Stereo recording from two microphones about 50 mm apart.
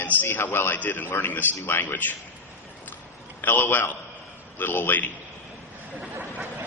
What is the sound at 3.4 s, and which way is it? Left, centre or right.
A man's voice, left.